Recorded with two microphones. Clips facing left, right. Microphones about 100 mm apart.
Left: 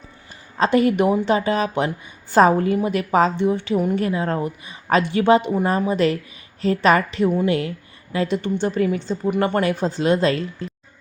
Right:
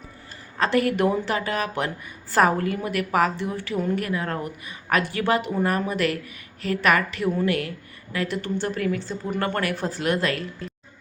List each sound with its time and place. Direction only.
0.6 s a woman's voice: 20° left (ahead or behind)